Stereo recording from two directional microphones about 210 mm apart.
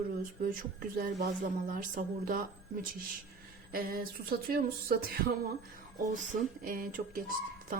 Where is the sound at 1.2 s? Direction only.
40° right (ahead or behind).